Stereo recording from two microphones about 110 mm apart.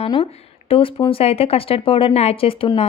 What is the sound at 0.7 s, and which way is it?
Speech, 60° left (ahead or behind).